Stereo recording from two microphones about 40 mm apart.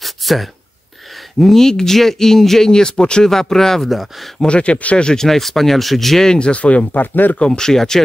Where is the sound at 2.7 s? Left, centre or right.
Centre.